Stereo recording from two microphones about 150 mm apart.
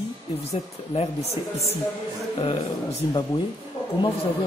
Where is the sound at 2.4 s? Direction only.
35° left (ahead or behind).